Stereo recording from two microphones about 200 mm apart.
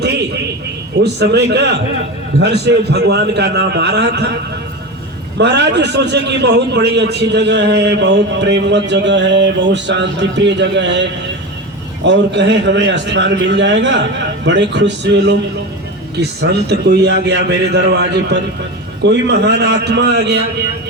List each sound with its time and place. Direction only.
0.0 s a sound: 60° right (ahead or behind)
1.0 s a man's voice: 55° right (ahead or behind)
5.4 s a man's voice: 60° right (ahead or behind)